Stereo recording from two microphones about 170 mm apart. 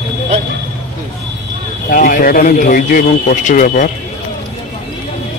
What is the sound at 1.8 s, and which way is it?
Speech, 55° left (ahead or behind).